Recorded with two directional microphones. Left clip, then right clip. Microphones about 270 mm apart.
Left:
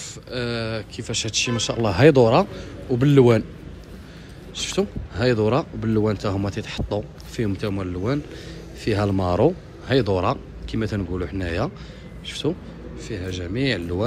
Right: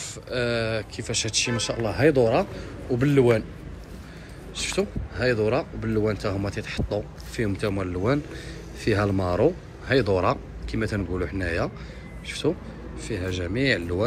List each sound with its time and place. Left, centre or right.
0.0 s a man's voice: centre
4.6 s a man's voice: centre